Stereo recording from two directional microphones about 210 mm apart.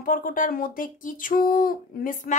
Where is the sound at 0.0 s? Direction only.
40° left (ahead or behind).